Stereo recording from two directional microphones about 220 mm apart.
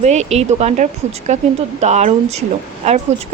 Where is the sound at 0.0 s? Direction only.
30° right (ahead or behind).